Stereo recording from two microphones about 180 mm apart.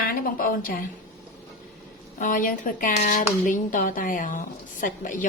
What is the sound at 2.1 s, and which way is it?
Speech, 45° left (ahead or behind).